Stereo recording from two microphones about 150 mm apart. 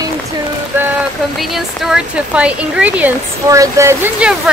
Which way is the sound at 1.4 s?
Centre (ahead or behind).